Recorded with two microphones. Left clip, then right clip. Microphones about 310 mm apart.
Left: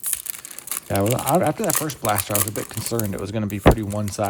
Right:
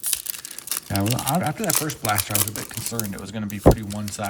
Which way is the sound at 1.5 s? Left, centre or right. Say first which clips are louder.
Left 1 dB; centre.